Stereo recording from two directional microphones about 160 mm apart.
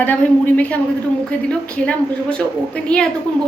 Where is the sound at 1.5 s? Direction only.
5° left (ahead or behind).